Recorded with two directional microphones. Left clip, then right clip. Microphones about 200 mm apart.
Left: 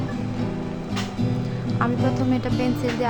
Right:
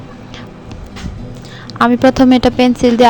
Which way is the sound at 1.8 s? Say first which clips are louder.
Right 15 dB; 45° right (ahead or behind).